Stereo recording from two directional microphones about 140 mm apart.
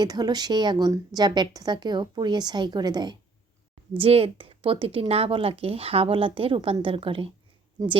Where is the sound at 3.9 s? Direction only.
40° right (ahead or behind).